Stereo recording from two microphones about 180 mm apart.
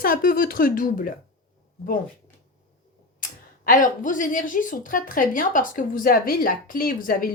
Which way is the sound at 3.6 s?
50° left (ahead or behind).